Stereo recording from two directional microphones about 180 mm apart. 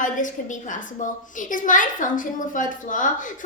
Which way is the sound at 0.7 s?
45° left (ahead or behind).